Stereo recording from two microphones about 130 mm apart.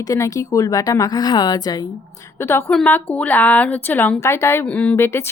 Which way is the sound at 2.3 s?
20° left (ahead or behind).